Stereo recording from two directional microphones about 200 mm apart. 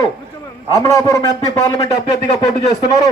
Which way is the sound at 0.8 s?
15° left (ahead or behind).